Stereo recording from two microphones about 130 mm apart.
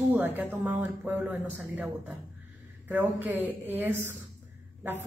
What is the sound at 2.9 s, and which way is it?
A woman's voice, 15° right (ahead or behind).